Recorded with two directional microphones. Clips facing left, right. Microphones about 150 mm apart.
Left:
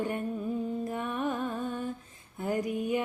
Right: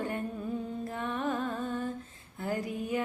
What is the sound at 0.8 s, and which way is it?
Music, 15° left (ahead or behind).